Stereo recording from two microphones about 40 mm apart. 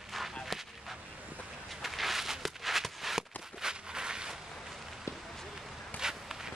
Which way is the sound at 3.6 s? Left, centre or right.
Centre.